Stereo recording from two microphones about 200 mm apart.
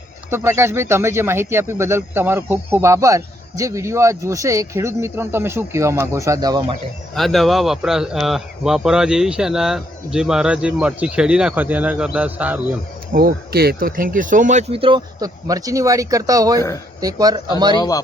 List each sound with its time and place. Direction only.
0.3 s speech: 10° right (ahead or behind)
7.2 s speech: centre (ahead or behind)
13.1 s speech: 50° right (ahead or behind); by 16.6 s 20° right (ahead or behind)
16.6 s speech: 15° left (ahead or behind)
17.0 s speech: 20° right (ahead or behind)
17.7 s speech: 20° left (ahead or behind)